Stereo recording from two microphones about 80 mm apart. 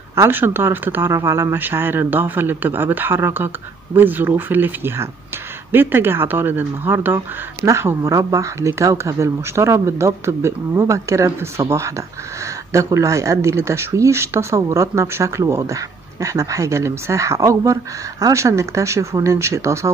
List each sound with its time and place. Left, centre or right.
0.1 s speech: right
7.6 s speech: right